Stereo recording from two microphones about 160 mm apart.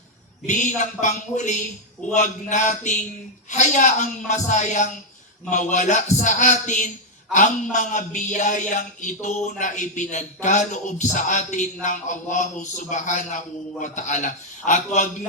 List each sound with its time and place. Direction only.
0.4 s a man's voice: 50° left (ahead or behind)